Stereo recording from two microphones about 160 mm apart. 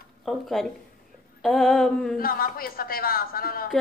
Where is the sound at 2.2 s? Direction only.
65° left (ahead or behind).